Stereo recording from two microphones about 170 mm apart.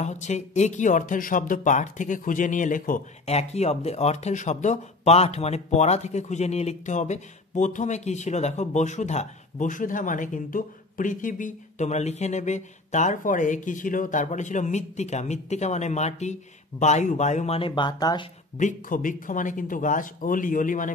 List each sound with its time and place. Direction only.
0.0 s speech: 45° left (ahead or behind); by 18.2 s 25° left (ahead or behind)
18.6 s speech: 50° left (ahead or behind)